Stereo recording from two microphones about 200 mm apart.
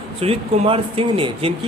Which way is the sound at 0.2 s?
30° right (ahead or behind).